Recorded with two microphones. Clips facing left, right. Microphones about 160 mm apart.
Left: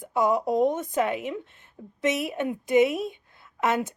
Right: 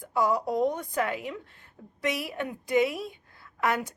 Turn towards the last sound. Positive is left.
turn(degrees=20)  # may be behind; listen again after turning